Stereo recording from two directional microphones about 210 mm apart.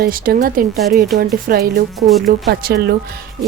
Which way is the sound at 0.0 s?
45° right (ahead or behind).